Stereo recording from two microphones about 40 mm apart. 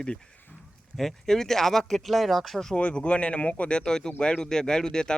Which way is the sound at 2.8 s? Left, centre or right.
Left.